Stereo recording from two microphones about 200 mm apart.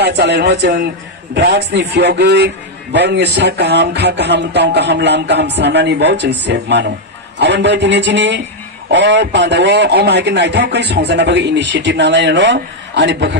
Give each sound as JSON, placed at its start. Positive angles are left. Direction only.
{"t": 0.0, "sound": "a man's voice", "side_deg": -55}